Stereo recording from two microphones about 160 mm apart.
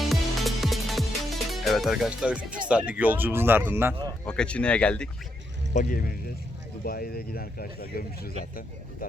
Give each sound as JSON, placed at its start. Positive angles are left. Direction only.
{"t": 0.1, "sound": "music", "side_deg": 0}
{"t": 2.6, "sound": "speech", "side_deg": -10}
{"t": 4.3, "sound": "speech", "side_deg": 5}
{"t": 5.7, "sound": "speech", "side_deg": 55}